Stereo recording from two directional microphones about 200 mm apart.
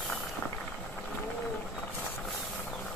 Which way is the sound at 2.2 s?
Centre (ahead or behind).